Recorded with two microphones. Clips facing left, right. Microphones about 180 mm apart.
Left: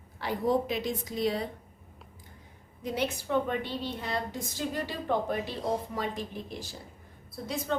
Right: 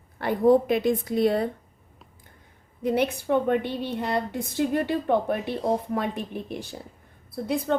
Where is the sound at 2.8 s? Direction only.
60° right (ahead or behind).